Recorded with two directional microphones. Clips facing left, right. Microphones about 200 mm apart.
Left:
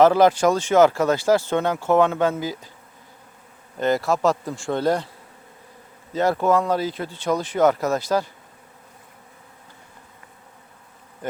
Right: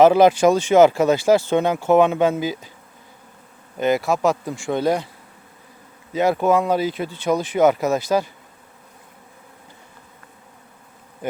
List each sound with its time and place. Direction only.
0.0 s speech: 10° right (ahead or behind)
0.9 s speech: 25° right (ahead or behind)
3.8 s speech: 15° right (ahead or behind)
6.1 s speech: 15° right (ahead or behind)